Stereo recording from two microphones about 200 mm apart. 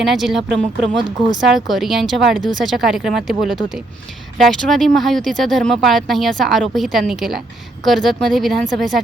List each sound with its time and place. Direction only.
0.0 s speech: centre (ahead or behind)
0.9 s speech: 25° right (ahead or behind)
1.4 s speech: centre (ahead or behind)